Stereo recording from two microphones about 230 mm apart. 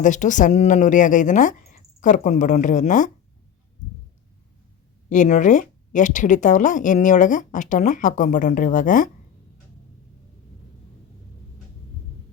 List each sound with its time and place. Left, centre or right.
0.0 s speech: left
5.0 s speech: left